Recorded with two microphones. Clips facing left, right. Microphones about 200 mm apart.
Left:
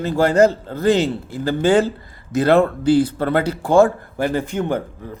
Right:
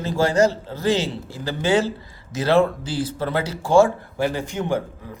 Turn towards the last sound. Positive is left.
turn(degrees=55)  # may be behind; listen again after turning